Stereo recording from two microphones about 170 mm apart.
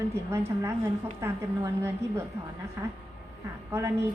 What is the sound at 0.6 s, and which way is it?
A woman's voice, 15° right (ahead or behind).